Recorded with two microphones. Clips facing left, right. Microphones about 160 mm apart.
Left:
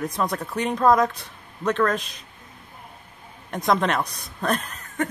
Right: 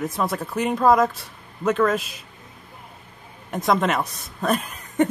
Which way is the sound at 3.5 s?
Centre (ahead or behind).